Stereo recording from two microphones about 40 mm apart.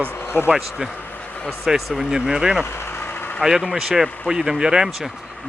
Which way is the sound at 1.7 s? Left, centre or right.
Centre.